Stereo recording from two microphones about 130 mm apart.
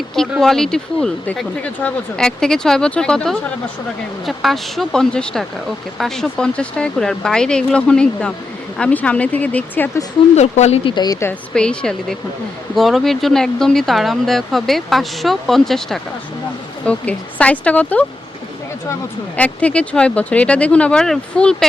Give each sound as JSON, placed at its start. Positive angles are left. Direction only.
{"t": 0.2, "sound": "speech", "side_deg": 5}
{"t": 10.3, "sound": "speech", "side_deg": 60}
{"t": 10.8, "sound": "speech", "side_deg": 35}
{"t": 11.5, "sound": "speech", "side_deg": 5}
{"t": 19.4, "sound": "speech", "side_deg": 10}